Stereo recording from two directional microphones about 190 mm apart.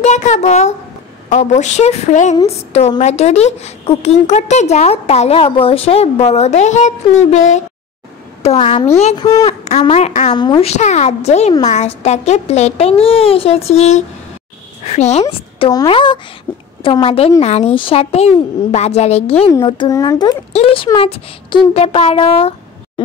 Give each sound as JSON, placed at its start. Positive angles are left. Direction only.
{"t": 0.0, "sound": "a woman's voice", "side_deg": 40}
{"t": 9.3, "sound": "a woman's voice", "side_deg": 20}
{"t": 9.7, "sound": "a woman's voice", "side_deg": 35}
{"t": 10.3, "sound": "a woman's voice", "side_deg": 25}
{"t": 19.5, "sound": "a woman's voice", "side_deg": 20}